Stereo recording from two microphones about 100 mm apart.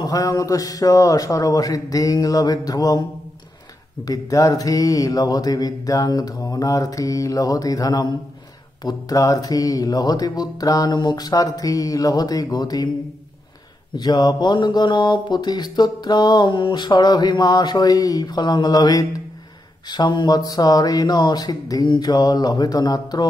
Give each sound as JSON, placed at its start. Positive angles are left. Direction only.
{"t": 0.0, "sound": "speech", "side_deg": 35}
{"t": 4.0, "sound": "speech", "side_deg": 35}
{"t": 13.9, "sound": "speech", "side_deg": 45}